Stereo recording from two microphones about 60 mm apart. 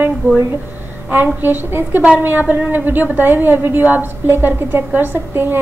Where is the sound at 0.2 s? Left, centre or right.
Right.